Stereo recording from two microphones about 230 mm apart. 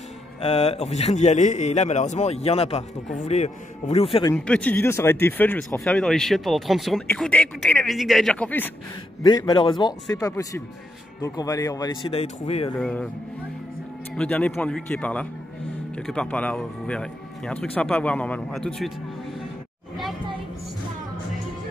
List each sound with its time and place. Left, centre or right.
0.4 s a man's voice: left
4.5 s speech: centre
9.2 s a man's voice: centre
12.7 s speech: centre
14.1 s speech: centre